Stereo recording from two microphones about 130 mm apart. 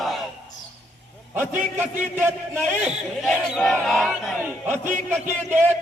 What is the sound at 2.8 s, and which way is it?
Battle cry, centre (ahead or behind).